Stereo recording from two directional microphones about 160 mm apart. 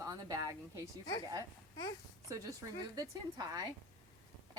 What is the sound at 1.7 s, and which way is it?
Speech, 25° left (ahead or behind).